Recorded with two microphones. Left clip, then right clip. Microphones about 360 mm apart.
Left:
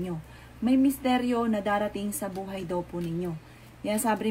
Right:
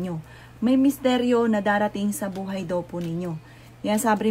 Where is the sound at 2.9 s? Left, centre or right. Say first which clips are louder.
Right 3 dB; right.